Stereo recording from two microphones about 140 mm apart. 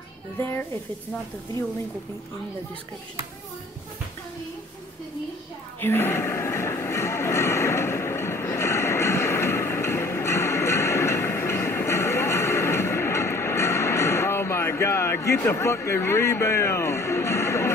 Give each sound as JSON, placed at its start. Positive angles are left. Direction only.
{"t": 0.4, "sound": "speech", "side_deg": 15}
{"t": 5.8, "sound": "music", "side_deg": 15}